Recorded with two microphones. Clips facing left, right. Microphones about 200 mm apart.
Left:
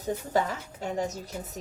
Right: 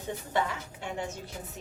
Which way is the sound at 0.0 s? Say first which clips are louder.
Left 4 dB; 40° left (ahead or behind).